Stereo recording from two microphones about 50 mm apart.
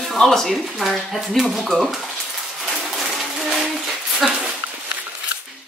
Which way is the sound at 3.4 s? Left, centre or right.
Centre.